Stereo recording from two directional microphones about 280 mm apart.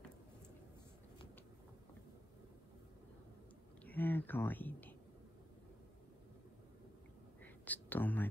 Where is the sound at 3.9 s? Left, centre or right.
Centre.